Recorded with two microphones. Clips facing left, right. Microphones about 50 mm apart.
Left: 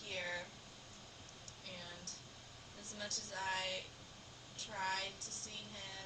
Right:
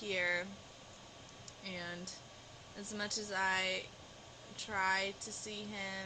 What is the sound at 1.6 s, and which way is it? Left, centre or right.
Music, right.